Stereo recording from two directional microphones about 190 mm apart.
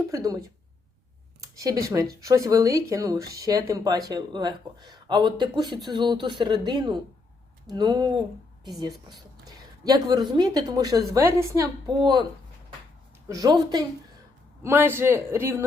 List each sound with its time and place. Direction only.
0.1 s speech: 20° right (ahead or behind)
1.4 s speech: 20° right (ahead or behind)
9.8 s speech: 20° right (ahead or behind)
13.2 s speech: 20° right (ahead or behind)